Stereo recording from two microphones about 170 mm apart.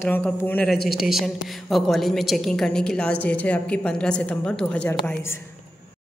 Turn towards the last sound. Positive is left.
turn(degrees=10)  # may be behind; listen again after turning